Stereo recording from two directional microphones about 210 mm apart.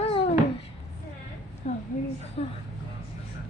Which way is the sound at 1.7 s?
35° left (ahead or behind).